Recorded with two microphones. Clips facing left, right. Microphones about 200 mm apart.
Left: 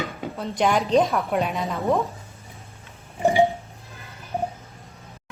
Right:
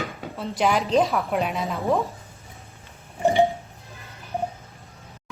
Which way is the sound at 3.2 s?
15° left (ahead or behind).